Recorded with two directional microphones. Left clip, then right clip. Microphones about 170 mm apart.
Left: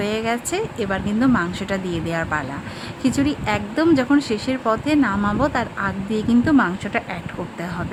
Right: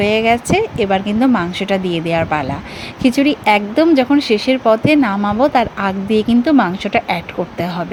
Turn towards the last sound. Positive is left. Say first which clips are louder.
# right 8 dB
turn(degrees=-20)  # may be behind; listen again after turning